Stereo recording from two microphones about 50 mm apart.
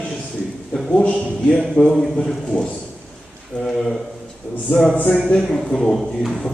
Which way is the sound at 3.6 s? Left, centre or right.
Centre.